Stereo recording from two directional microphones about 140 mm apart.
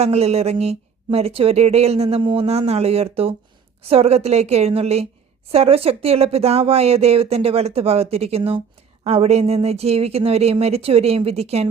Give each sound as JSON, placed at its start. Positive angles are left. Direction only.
{"t": 0.0, "sound": "speech", "side_deg": -50}